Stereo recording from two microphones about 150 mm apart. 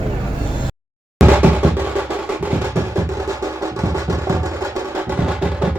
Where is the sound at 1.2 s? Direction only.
10° right (ahead or behind).